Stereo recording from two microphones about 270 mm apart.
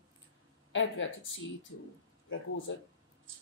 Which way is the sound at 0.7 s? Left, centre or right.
Left.